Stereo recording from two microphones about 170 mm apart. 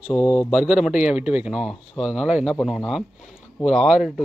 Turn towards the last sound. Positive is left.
turn(degrees=0)  # may be behind; listen again after turning